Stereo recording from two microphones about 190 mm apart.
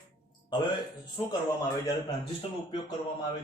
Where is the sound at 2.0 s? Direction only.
25° left (ahead or behind).